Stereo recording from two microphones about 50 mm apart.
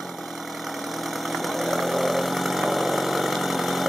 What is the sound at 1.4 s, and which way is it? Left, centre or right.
Engine, centre.